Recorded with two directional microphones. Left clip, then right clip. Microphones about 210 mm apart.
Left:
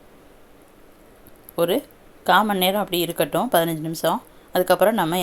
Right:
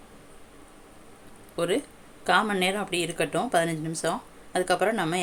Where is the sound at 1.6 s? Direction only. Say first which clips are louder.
Left 6 dB; 20° left (ahead or behind).